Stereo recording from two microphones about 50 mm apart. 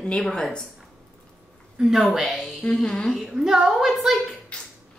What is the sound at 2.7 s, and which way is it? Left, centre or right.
Speech, centre.